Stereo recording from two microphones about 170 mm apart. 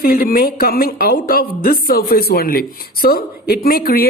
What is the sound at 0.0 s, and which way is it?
Speech, 60° left (ahead or behind).